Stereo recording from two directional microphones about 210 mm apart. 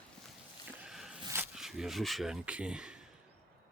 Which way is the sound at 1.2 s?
15° right (ahead or behind).